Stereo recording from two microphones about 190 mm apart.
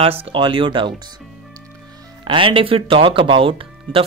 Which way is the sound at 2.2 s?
25° right (ahead or behind).